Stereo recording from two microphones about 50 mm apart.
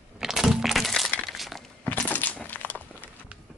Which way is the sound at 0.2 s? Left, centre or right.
Centre.